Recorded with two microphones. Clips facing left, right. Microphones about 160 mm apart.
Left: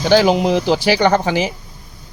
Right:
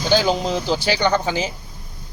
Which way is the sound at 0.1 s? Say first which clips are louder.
Left 6 dB; 70° left (ahead or behind).